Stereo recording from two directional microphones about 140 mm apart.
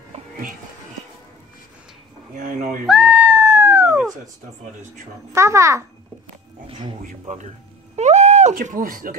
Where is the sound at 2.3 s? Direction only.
70° right (ahead or behind).